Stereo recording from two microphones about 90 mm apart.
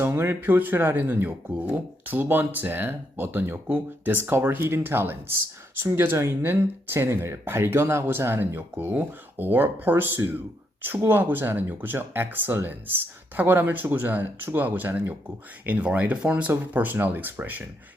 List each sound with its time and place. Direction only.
0.0 s speech: 25° right (ahead or behind)